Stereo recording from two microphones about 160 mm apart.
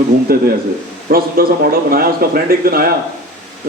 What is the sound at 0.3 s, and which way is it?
A man's voice, 65° right (ahead or behind).